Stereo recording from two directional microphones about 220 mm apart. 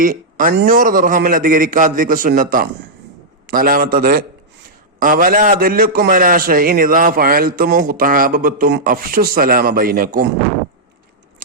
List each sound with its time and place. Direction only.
0.0 s a man's voice: 40° right (ahead or behind)